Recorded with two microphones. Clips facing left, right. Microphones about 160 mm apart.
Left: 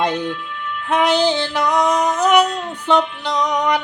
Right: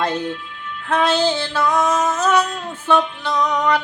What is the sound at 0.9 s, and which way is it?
Music, 15° left (ahead or behind).